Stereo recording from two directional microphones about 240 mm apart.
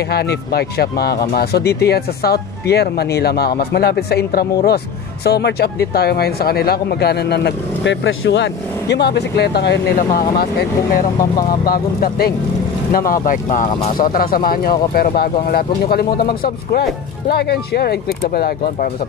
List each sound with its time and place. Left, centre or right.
0.1 s speech: left